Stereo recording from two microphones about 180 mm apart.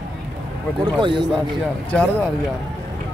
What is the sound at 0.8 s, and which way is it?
Speech, 25° right (ahead or behind).